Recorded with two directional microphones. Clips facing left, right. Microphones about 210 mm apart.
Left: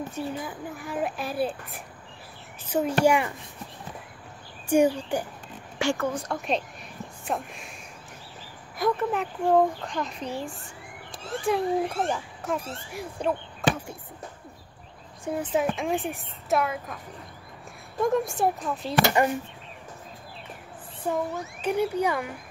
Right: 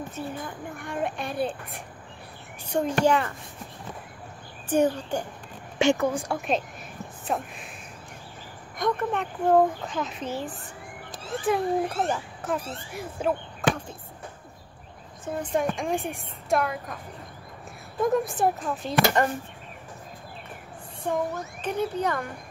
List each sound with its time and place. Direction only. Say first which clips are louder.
0.1 s a child's voice: left 2 dB; 5° left (ahead or behind)
4.6 s speech: left 2 dB; 10° left (ahead or behind)
5.8 s a woman's voice: right 4 dB; 20° right (ahead or behind)
6.2 s a child's voice: right 1 dB; centre (ahead or behind)
8.7 s a child's voice: left 1 dB; 5° left (ahead or behind)
15.5 s a child's voice: even; 5° left (ahead or behind)
18.0 s a child's voice: right 1 dB; centre (ahead or behind)
21.0 s a child's voice: even; 5° left (ahead or behind)